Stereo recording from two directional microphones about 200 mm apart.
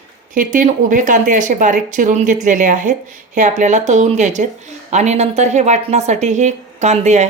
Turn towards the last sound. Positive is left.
turn(degrees=-35)  # may be behind; listen again after turning